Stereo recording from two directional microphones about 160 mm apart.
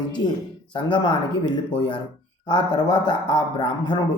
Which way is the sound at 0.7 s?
30° left (ahead or behind).